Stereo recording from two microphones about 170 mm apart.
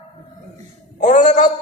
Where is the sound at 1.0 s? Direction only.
45° left (ahead or behind).